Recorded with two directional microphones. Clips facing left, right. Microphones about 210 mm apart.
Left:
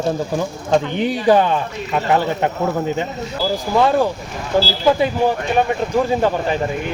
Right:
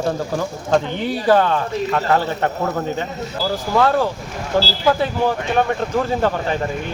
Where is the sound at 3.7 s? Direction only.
15° left (ahead or behind).